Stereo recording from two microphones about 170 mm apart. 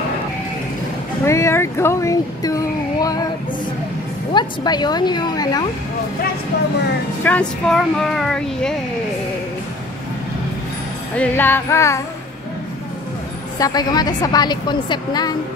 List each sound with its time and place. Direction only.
1.2 s speech: 15° left (ahead or behind)
4.3 s a woman's voice: 25° left (ahead or behind)
7.2 s speech: 5° left (ahead or behind)
11.1 s speech: 10° left (ahead or behind)
13.6 s a woman's voice: 20° left (ahead or behind)